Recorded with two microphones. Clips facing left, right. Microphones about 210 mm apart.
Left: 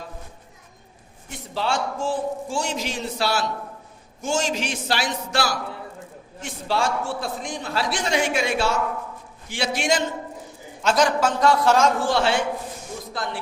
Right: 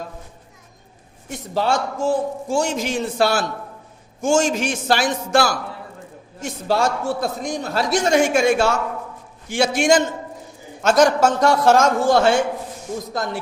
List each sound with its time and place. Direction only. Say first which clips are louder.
1.5 s a man's voice: right 4 dB; 40° right (ahead or behind)